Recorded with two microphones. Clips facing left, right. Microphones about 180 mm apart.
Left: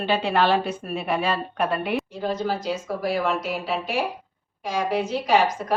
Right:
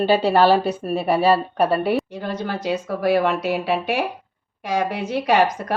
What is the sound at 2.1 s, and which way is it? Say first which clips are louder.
Speech: left 1 dB; 60° right (ahead or behind).